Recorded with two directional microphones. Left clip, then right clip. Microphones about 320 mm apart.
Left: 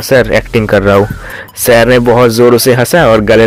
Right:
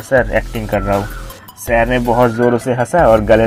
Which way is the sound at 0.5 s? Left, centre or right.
Left.